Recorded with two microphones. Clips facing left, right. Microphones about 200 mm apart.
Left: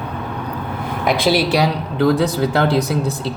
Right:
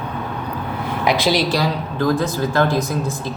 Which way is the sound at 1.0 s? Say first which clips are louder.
Left 2 dB; 55° left (ahead or behind).